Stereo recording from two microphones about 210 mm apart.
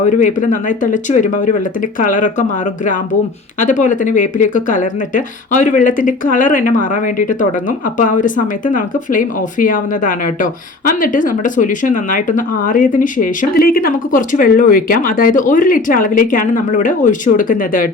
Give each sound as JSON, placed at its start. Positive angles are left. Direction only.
{"t": 0.0, "sound": "speech", "side_deg": 35}
{"t": 3.6, "sound": "speech", "side_deg": 35}